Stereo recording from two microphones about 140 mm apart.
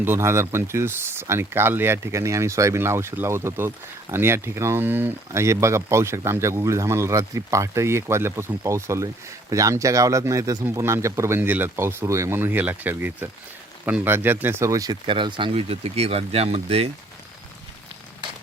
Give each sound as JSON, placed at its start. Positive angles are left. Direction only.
{"t": 0.0, "sound": "speech", "side_deg": -15}
{"t": 15.0, "sound": "speech", "side_deg": -35}